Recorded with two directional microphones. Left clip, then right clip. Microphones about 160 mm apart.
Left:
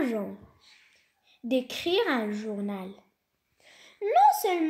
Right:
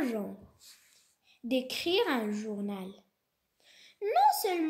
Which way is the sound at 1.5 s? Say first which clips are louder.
Left 3 dB; 35° left (ahead or behind).